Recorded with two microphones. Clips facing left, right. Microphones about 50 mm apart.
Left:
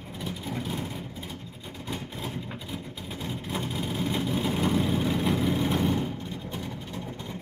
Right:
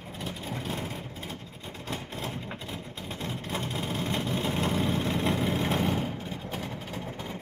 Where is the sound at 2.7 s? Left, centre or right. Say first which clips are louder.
Left 1 dB; centre.